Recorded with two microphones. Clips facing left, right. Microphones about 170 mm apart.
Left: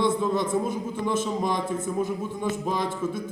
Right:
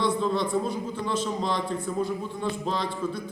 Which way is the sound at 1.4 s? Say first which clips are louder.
Left 2 dB; 15° left (ahead or behind).